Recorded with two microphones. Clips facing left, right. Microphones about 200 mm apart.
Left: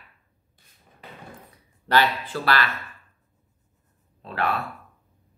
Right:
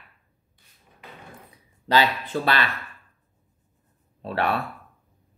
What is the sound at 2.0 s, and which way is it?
Speech, 20° right (ahead or behind).